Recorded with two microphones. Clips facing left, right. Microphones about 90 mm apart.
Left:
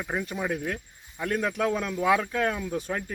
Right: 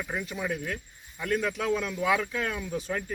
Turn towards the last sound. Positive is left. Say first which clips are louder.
# left 1 dB
turn(degrees=45)  # may be behind; listen again after turning